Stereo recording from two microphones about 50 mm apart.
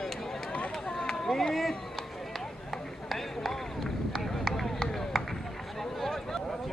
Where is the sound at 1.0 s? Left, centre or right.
Centre.